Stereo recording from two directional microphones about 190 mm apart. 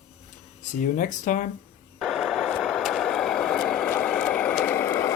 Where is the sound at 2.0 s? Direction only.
Centre (ahead or behind).